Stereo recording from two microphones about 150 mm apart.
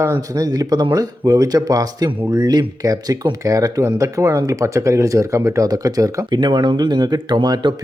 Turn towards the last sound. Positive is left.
turn(degrees=-30)  # may be behind; listen again after turning